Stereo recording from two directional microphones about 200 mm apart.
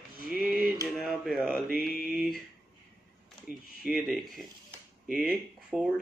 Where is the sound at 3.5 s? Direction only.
40° right (ahead or behind).